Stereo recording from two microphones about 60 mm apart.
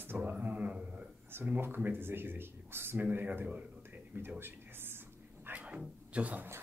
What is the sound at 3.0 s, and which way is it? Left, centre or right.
Speech, right.